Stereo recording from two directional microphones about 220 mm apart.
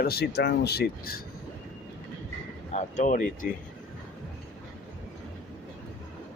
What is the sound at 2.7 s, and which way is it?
Speech, 30° left (ahead or behind).